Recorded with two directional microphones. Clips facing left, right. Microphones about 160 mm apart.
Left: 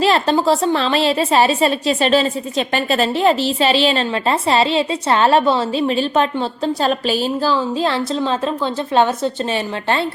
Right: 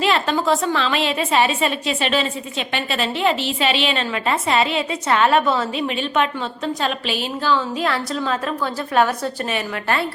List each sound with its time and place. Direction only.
0.0 s a woman's voice: 35° left (ahead or behind)